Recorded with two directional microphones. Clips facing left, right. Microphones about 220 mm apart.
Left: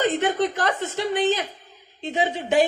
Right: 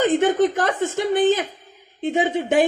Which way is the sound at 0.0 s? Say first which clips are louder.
Right 5 dB; 50° right (ahead or behind).